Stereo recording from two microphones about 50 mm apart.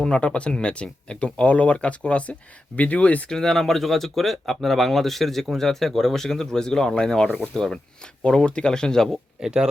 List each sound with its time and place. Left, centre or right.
0.0 s speech: left
3.2 s speech: centre
7.3 s speech: left
7.5 s speech: centre
9.4 s speech: centre